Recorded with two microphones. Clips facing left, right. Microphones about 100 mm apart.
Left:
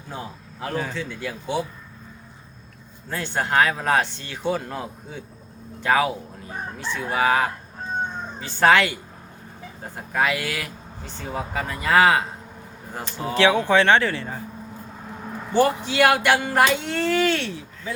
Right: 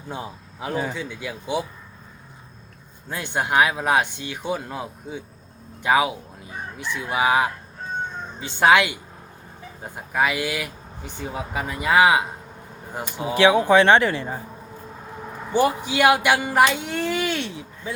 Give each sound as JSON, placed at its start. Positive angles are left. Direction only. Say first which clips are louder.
{"t": 0.1, "sound": "speech", "louder": "right 2 dB", "side_deg": -20}
{"t": 3.1, "sound": "speech", "louder": "even", "side_deg": -15}
{"t": 5.8, "sound": "speech", "louder": "right 1 dB", "side_deg": -15}
{"t": 15.5, "sound": "speech", "louder": "left 1 dB", "side_deg": -10}